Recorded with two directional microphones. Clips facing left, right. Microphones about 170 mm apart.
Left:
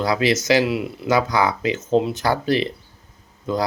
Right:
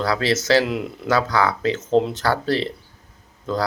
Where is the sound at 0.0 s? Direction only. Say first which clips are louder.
Left 2 dB; 15° left (ahead or behind).